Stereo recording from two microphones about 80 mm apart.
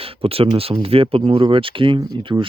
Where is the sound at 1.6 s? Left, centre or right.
Right.